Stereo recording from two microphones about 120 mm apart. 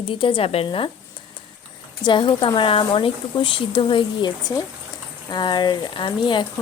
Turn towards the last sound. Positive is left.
turn(degrees=40)  # may be behind; listen again after turning